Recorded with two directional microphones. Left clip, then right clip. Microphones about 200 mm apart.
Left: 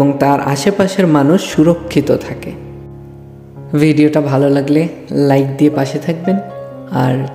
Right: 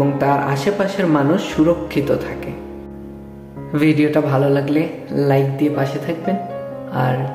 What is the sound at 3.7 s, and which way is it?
Speech, 40° left (ahead or behind).